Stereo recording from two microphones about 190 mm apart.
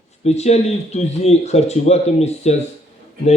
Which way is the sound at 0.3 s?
35° left (ahead or behind).